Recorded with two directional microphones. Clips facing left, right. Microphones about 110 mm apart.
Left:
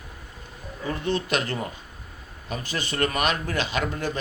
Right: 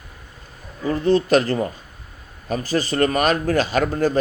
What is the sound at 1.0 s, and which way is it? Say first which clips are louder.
A man's voice: right 10 dB; 35° right (ahead or behind).